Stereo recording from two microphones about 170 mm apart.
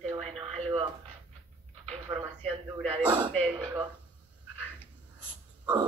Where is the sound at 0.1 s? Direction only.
35° right (ahead or behind).